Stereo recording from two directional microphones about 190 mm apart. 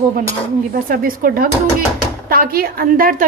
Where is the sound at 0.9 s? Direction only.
50° right (ahead or behind).